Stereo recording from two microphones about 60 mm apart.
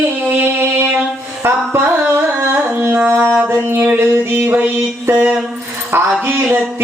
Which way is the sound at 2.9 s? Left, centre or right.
Right.